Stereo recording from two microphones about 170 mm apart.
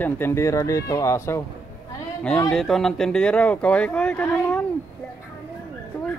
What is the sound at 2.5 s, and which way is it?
Speech, centre (ahead or behind).